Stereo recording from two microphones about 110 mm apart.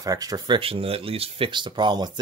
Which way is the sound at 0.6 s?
60° right (ahead or behind).